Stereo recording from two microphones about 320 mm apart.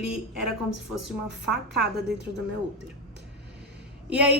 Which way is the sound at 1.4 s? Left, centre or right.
Centre.